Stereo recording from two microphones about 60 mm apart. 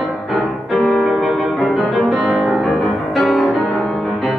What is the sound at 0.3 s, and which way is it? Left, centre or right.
Music, centre.